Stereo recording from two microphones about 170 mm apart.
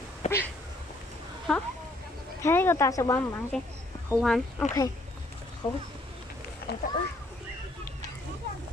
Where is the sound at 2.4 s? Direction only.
15° left (ahead or behind).